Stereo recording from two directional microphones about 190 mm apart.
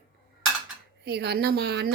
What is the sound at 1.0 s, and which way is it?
Speech, 60° right (ahead or behind).